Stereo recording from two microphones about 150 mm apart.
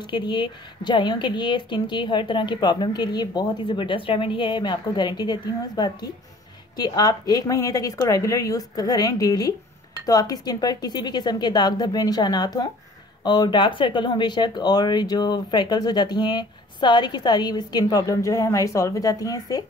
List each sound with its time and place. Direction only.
0.0 s speech: 30° left (ahead or behind)